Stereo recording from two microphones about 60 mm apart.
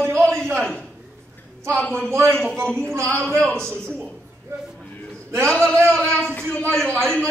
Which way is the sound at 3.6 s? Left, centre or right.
Centre.